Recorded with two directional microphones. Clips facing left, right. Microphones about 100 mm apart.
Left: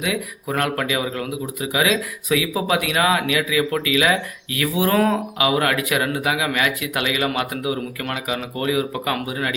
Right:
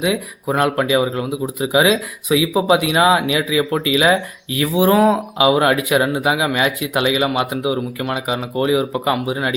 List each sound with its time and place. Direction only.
0.0 s speech: 25° right (ahead or behind)